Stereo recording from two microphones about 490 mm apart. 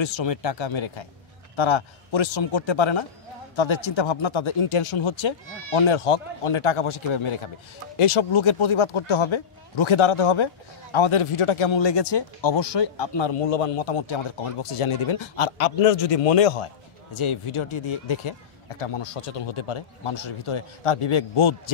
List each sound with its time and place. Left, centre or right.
0.0 s a man's voice: left
5.8 s speech: left
16.1 s a man's voice: left
17.1 s speech: left